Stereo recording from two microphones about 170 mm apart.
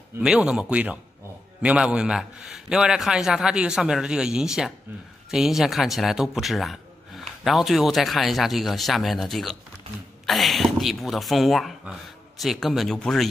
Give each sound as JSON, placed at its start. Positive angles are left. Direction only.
{"t": 0.2, "sound": "a man's voice", "side_deg": -5}